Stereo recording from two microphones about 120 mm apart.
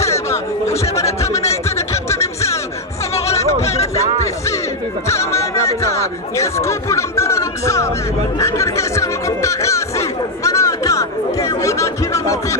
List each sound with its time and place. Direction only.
0.0 s music: 25° left (ahead or behind)
1.4 s a sound: 25° left (ahead or behind)
3.2 s music: 25° left (ahead or behind)
5.0 s speech: 25° left (ahead or behind)
8.4 s music: 25° left (ahead or behind)